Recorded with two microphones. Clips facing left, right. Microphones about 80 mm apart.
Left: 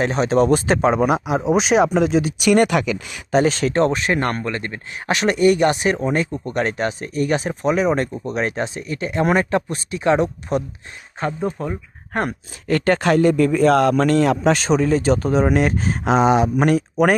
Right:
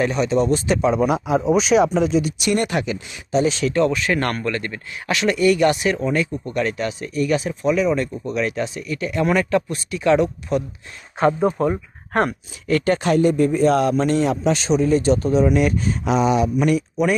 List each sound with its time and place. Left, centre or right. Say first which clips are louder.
0.0 s speech: left 2 dB; left
1.1 s speech: even; left
2.5 s speech: left 6 dB; left
3.3 s speech: left 2 dB; left
8.3 s speech: even; left
11.4 s speech: right 5 dB; centre
12.8 s speech: left 3 dB; left
13.1 s speech: left 1 dB; left
13.7 s speech: left 2 dB; left
15.6 s speech: even; left